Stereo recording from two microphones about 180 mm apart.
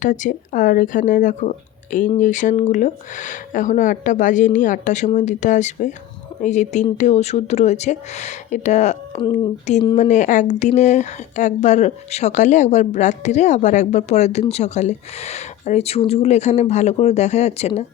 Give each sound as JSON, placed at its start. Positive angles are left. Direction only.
{"t": 0.0, "sound": "speech", "side_deg": 45}